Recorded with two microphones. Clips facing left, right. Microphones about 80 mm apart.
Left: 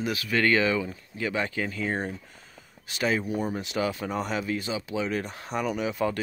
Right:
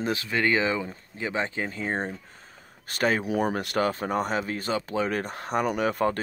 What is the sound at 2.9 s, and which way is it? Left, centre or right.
Speech, right.